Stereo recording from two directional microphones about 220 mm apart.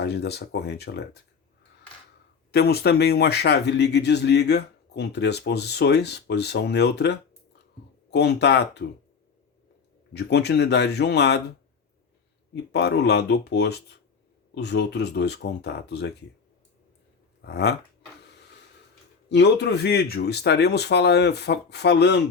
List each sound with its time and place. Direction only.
0.0 s speech: 50° left (ahead or behind)
2.5 s speech: 45° left (ahead or behind)
10.1 s speech: 50° left (ahead or behind)
12.7 s speech: 50° left (ahead or behind)
17.4 s speech: 50° left (ahead or behind)
19.3 s speech: 50° left (ahead or behind)